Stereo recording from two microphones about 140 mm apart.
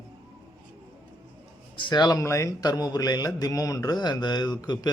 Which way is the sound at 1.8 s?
30° left (ahead or behind).